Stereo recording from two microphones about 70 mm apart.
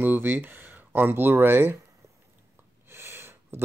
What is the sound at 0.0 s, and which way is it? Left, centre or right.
Speech, right.